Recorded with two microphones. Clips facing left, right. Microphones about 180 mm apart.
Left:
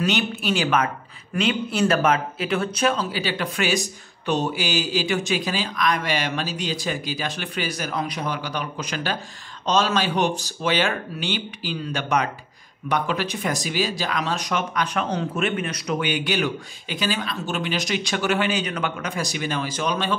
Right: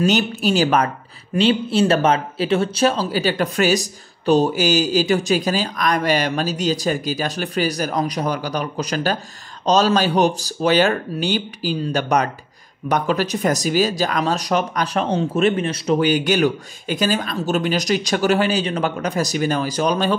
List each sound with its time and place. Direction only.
0.0 s speech: 40° right (ahead or behind)